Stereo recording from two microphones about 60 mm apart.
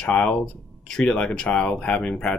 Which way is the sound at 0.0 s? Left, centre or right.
Centre.